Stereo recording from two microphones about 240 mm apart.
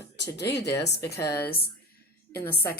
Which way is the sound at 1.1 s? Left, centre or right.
Centre.